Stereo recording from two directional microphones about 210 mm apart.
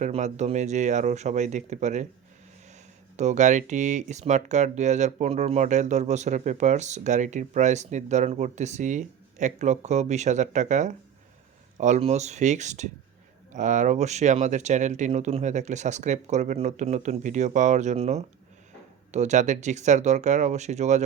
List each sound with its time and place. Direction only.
0.0 s speech: 35° right (ahead or behind)
3.2 s speech: 35° right (ahead or behind)